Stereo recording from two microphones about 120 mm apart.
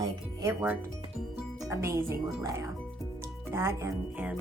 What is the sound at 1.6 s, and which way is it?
Speech, 25° right (ahead or behind).